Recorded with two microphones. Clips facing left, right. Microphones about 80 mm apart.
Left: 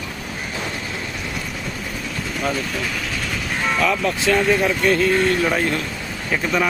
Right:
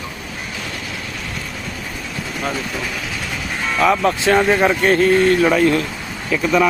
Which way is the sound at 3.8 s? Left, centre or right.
Right.